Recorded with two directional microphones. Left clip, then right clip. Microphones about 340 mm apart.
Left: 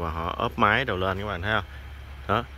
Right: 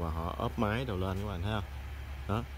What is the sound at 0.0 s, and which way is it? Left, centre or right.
Speech, centre.